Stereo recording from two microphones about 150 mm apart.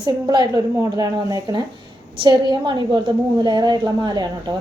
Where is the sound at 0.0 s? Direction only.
25° right (ahead or behind).